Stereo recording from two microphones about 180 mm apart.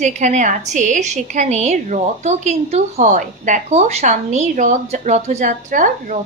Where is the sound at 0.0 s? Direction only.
40° right (ahead or behind).